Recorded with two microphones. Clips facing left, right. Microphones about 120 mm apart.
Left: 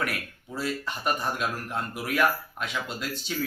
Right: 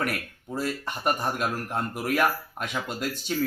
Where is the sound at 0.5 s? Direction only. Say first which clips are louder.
Right 1 dB; 45° right (ahead or behind).